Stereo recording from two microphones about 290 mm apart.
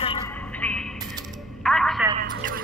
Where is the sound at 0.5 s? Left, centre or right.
Centre.